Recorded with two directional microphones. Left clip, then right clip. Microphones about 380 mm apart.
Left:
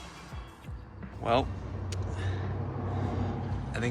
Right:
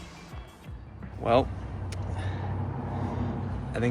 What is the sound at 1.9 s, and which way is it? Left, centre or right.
Vehicle, centre.